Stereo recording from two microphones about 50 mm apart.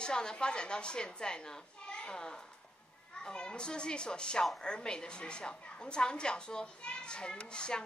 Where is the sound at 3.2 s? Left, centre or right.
Centre.